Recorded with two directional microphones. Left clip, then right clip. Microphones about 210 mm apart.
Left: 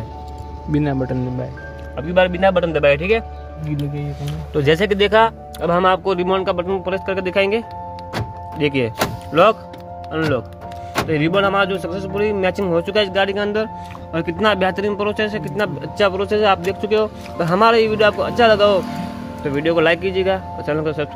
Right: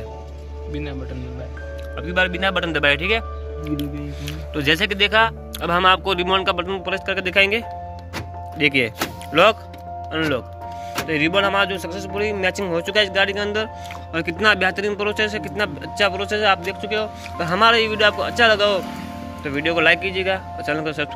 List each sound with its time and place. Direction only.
0.7 s speech: 30° left (ahead or behind)
2.0 s speech: 5° right (ahead or behind)
3.7 s speech: 20° left (ahead or behind)
5.7 s speech: 5° left (ahead or behind)